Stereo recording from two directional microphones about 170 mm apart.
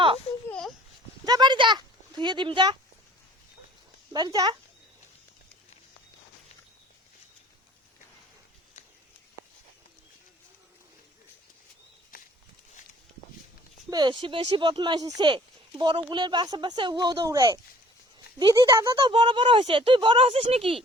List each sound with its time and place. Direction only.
1.2 s a sound: 25° right (ahead or behind)
4.1 s speech: 25° right (ahead or behind)
13.9 s speech: 25° right (ahead or behind)